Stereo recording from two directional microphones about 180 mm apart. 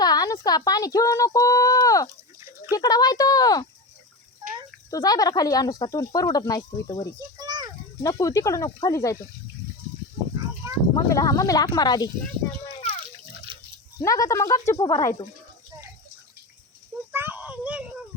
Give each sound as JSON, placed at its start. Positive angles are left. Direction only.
{"t": 0.0, "sound": "speech", "side_deg": 20}
{"t": 4.9, "sound": "speech", "side_deg": 20}
{"t": 7.3, "sound": "children playing", "side_deg": -20}
{"t": 8.0, "sound": "speech", "side_deg": 20}
{"t": 10.9, "sound": "speech", "side_deg": 20}
{"t": 14.0, "sound": "speech", "side_deg": 15}
{"t": 17.1, "sound": "a sound", "side_deg": -10}